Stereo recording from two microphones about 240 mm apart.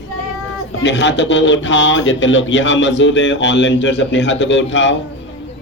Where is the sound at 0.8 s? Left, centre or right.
Left.